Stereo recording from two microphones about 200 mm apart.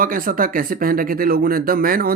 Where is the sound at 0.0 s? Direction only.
45° right (ahead or behind).